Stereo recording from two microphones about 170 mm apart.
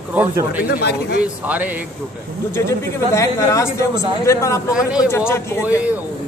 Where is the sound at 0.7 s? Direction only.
75° left (ahead or behind).